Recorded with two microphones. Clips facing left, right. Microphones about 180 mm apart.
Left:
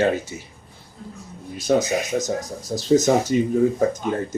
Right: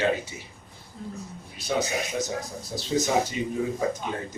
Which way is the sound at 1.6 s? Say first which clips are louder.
Left 7 dB; 45° left (ahead or behind).